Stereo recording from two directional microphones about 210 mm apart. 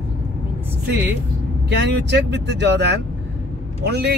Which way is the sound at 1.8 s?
55° right (ahead or behind).